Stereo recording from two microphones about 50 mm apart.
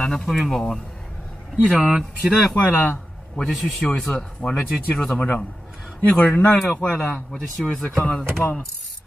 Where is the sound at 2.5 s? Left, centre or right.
Left.